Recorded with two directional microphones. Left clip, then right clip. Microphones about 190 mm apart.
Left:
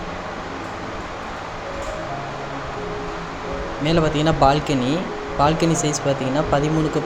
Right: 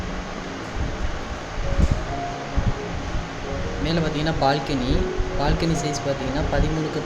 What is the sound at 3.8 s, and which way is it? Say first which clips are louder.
Speech: left 6 dB; 20° left (ahead or behind).